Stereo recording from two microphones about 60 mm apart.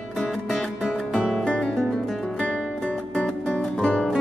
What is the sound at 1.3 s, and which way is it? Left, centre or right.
Music, centre.